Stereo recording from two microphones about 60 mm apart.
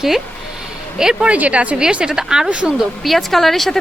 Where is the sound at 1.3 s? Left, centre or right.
Right.